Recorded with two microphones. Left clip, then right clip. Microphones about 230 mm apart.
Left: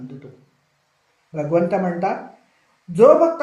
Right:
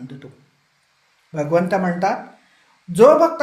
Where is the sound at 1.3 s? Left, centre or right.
Right.